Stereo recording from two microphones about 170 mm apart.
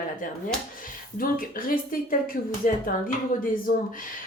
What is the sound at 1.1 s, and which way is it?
A woman's voice, 55° left (ahead or behind).